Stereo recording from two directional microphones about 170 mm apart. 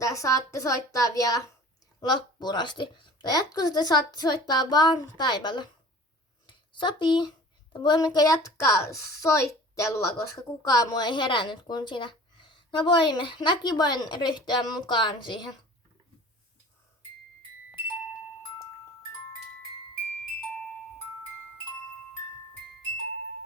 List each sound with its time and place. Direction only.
0.0 s a woman's voice: 20° left (ahead or behind)
6.5 s a sound: 25° left (ahead or behind)
7.7 s a woman's voice: 25° left (ahead or behind)